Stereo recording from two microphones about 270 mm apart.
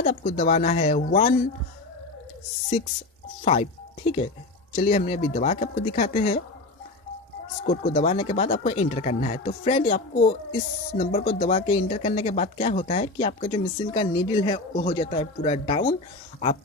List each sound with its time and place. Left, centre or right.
0.0 s speech: left
2.8 s speech: left
4.7 s speech: left
7.6 s speech: left